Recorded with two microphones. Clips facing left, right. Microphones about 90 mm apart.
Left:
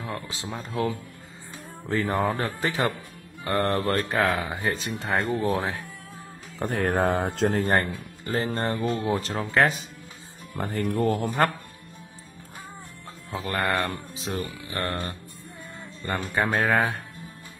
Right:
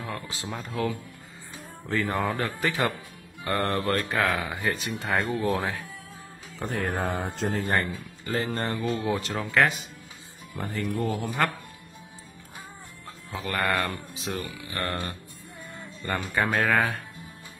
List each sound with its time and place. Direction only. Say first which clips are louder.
0.0 s a sound: left 1 dB; 25° left (ahead or behind)
0.7 s speech: left 2 dB; 25° left (ahead or behind)
1.9 s speech: left 2 dB; 35° left (ahead or behind)
6.6 s speech: left 5 dB; 60° left (ahead or behind); by 7.6 s 90° left
7.6 s speech: left 3 dB; 50° left (ahead or behind)
8.3 s speech: left 2 dB; 35° left (ahead or behind)
10.6 s speech: left 4 dB; 55° left (ahead or behind)
13.3 s speech: left 1 dB; 30° left (ahead or behind)
16.3 s speech: left 1 dB; 30° left (ahead or behind)